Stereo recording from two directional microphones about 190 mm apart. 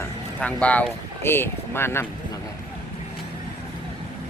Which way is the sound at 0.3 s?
5° left (ahead or behind).